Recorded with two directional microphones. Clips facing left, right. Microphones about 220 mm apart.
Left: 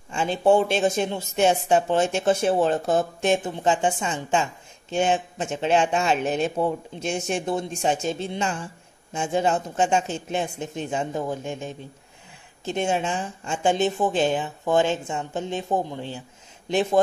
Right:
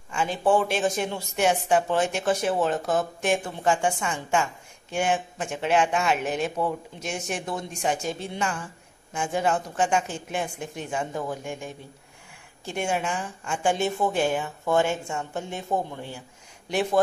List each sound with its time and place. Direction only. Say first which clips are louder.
0.1 s speech: left 3 dB; 25° left (ahead or behind)